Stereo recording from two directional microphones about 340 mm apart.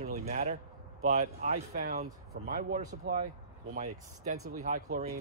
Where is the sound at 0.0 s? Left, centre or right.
Right.